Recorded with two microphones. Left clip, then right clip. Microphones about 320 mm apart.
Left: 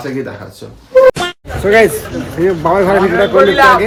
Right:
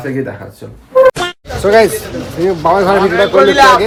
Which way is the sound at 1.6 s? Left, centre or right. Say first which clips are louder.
Even; centre.